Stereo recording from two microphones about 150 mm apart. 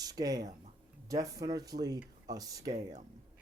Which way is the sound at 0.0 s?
25° right (ahead or behind).